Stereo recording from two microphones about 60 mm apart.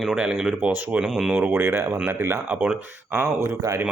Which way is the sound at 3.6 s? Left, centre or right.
Right.